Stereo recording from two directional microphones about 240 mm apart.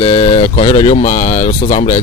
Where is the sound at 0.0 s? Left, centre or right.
Centre.